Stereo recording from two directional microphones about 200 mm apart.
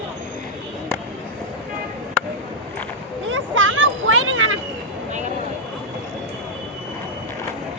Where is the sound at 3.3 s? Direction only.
75° right (ahead or behind); by 4.6 s 90° right.